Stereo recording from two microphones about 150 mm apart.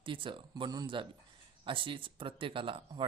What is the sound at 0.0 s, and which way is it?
Speech, 35° right (ahead or behind).